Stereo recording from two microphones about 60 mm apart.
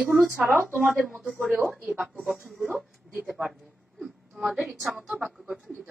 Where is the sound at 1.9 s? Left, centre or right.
Centre.